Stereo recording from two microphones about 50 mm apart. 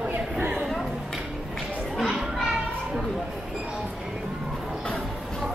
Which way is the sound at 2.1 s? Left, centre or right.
Centre.